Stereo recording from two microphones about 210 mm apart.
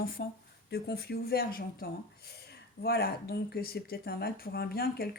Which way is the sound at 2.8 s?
50° left (ahead or behind).